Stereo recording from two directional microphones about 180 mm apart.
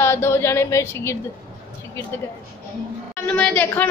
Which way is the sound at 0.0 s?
15° left (ahead or behind).